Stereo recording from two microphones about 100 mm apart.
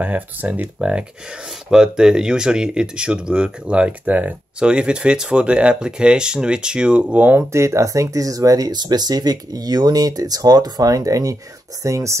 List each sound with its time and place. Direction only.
0.0 s speech: 15° right (ahead or behind); by 12.2 s 30° right (ahead or behind)